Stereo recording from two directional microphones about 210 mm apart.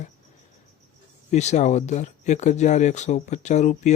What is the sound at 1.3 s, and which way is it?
Speech, 35° left (ahead or behind).